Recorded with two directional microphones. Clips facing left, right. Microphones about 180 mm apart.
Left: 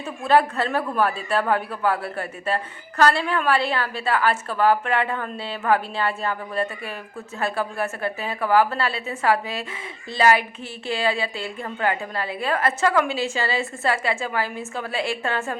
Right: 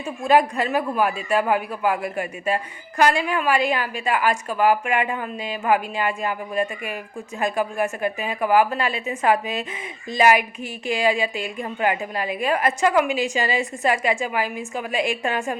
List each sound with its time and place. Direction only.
0.0 s a woman's voice: 15° right (ahead or behind)